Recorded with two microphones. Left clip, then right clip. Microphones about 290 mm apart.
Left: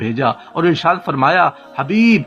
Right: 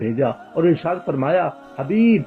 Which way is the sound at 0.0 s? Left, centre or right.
Left.